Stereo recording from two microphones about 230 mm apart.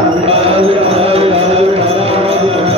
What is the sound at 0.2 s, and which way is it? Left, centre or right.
Music, right.